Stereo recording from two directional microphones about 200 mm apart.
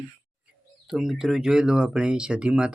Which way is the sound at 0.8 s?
Centre (ahead or behind).